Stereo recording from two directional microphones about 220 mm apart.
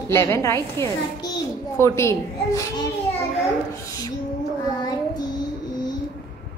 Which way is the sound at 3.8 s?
15° left (ahead or behind).